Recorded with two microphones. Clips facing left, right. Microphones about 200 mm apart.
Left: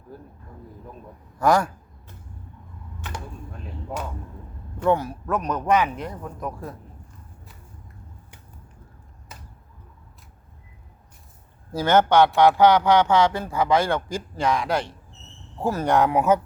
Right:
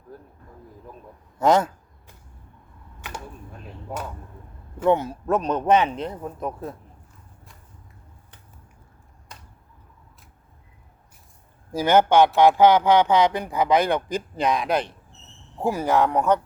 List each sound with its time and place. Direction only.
0.1 s speech: 5° left (ahead or behind)
1.4 s a man's voice: 20° right (ahead or behind)
4.9 s a man's voice: 25° right (ahead or behind)
9.3 s a sound: 5° left (ahead or behind)
11.8 s speech: 15° right (ahead or behind)
15.9 s speech: centre (ahead or behind)